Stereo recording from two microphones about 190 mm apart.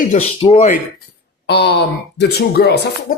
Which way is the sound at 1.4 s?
60° left (ahead or behind).